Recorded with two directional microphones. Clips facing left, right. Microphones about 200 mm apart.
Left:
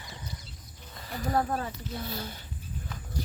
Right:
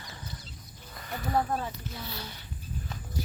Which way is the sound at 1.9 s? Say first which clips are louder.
Left 4 dB; 50° left (ahead or behind).